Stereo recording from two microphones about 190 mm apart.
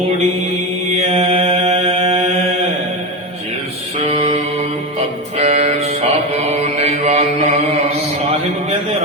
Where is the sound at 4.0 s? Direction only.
35° right (ahead or behind).